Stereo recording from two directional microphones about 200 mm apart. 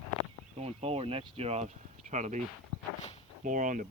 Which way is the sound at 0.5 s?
30° right (ahead or behind).